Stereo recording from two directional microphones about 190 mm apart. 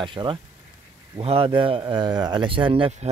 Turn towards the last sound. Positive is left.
turn(degrees=-35)  # may be behind; listen again after turning